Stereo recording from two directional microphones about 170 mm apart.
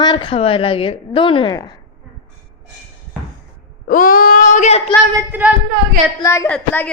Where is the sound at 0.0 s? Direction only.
30° left (ahead or behind).